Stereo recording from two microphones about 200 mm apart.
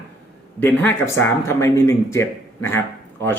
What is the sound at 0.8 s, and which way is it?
Speech, 10° left (ahead or behind).